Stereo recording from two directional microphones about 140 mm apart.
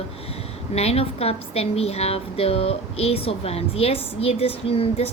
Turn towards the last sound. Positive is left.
turn(degrees=45)  # may be behind; listen again after turning